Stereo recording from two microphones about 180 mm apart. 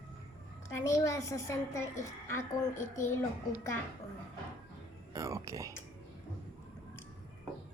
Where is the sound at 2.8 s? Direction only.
40° left (ahead or behind).